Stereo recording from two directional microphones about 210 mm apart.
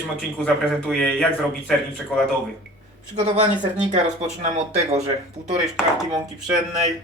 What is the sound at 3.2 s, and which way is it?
Speech, 35° right (ahead or behind).